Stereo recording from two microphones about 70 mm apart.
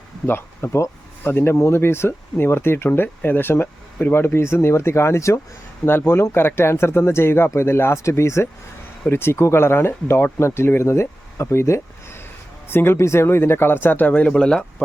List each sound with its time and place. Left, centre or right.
0.3 s speech: left; by 14.6 s centre